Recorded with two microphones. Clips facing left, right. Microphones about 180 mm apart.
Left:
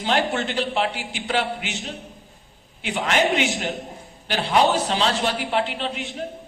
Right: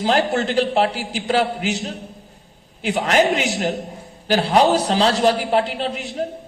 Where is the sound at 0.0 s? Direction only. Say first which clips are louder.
Right 4 dB; 40° right (ahead or behind).